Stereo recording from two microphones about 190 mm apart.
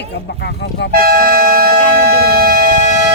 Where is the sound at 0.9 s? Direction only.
50° right (ahead or behind).